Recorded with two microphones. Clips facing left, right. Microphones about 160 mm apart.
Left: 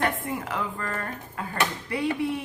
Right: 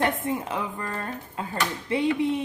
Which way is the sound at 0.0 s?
20° right (ahead or behind).